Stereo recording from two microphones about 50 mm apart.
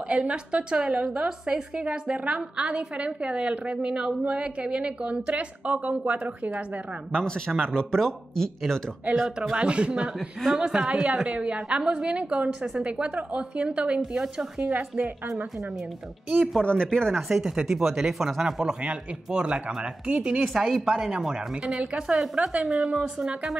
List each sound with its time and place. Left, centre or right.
0.1 s a woman's voice: right
7.7 s speech: centre
9.5 s a woman's voice: right
13.9 s a woman's voice: centre
14.7 s a woman's voice: right
16.6 s speech: centre
17.3 s a woman's voice: centre